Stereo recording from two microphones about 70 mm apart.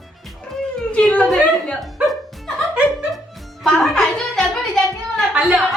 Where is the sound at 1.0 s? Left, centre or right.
Centre.